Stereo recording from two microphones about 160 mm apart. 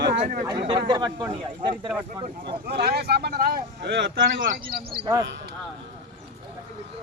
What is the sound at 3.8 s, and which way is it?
Speech, 90° right.